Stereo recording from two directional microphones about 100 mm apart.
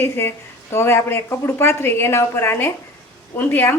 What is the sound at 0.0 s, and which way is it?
A woman's voice, 25° left (ahead or behind).